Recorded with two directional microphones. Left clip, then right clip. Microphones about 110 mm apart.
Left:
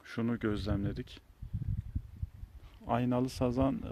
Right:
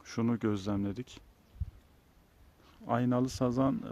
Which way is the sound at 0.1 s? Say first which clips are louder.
Right 2 dB; 5° right (ahead or behind).